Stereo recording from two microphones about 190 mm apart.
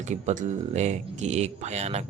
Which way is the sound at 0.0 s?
40° right (ahead or behind).